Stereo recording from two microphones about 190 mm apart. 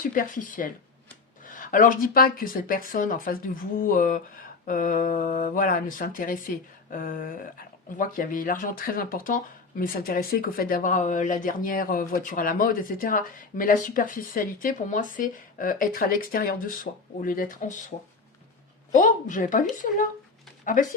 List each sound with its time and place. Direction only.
0.1 s speech: 45° left (ahead or behind)